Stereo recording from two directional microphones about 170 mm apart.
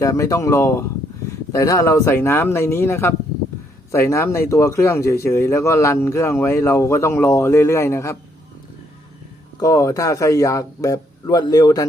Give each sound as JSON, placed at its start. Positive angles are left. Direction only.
{"t": 0.0, "sound": "speech", "side_deg": 20}
{"t": 9.6, "sound": "speech", "side_deg": 20}